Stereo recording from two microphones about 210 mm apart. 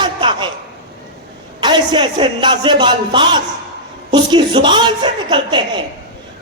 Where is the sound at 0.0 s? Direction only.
25° right (ahead or behind).